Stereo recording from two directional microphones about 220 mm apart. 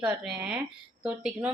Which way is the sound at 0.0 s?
5° right (ahead or behind).